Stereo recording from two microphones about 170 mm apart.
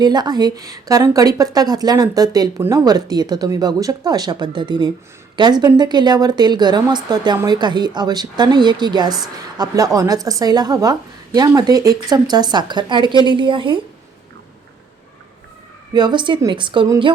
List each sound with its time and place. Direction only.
0.0 s speech: 25° right (ahead or behind)
15.9 s speech: 25° right (ahead or behind)